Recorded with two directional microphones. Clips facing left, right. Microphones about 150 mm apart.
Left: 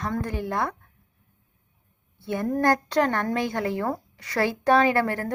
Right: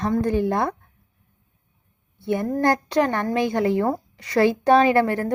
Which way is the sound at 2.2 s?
15° right (ahead or behind).